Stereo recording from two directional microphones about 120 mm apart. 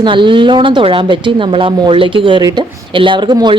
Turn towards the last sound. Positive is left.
turn(degrees=-35)  # may be behind; listen again after turning